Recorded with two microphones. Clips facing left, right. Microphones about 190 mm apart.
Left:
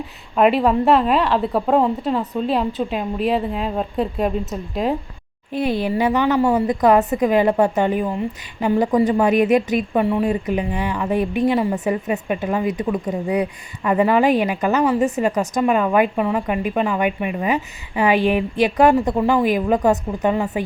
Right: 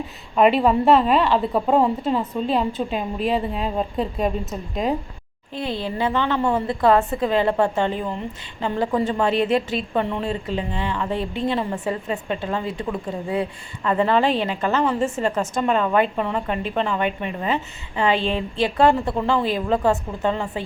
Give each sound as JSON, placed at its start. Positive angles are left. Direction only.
{"t": 0.3, "sound": "a woman's voice", "side_deg": 0}
{"t": 5.5, "sound": "a woman's voice", "side_deg": 20}